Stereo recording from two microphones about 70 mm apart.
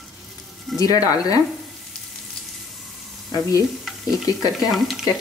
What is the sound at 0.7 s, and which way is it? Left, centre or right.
Speech, left.